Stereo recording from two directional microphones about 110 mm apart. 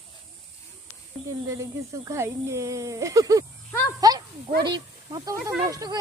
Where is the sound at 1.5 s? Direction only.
30° right (ahead or behind).